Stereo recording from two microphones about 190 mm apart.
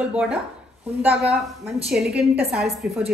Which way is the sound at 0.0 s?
5° right (ahead or behind).